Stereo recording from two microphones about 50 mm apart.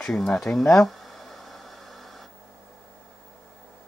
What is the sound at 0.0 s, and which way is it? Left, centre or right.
Speech, centre.